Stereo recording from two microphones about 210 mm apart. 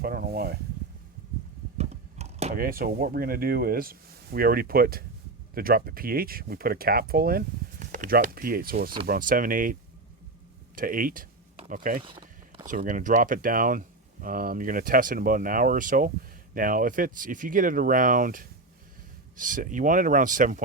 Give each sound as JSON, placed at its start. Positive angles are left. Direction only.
{"t": 0.0, "sound": "speech", "side_deg": -45}
{"t": 1.8, "sound": "a sound", "side_deg": -30}
{"t": 2.6, "sound": "speech", "side_deg": -45}
{"t": 10.8, "sound": "speech", "side_deg": -40}
{"t": 12.0, "sound": "a sound", "side_deg": -25}
{"t": 12.6, "sound": "speech", "side_deg": -40}